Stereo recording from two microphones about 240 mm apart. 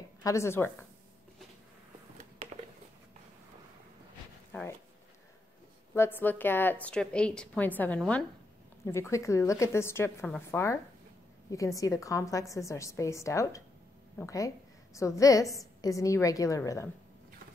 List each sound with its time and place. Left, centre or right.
0.2 s a woman's voice: centre
2.4 s a sound: right
4.5 s speech: centre
5.9 s a woman's voice: centre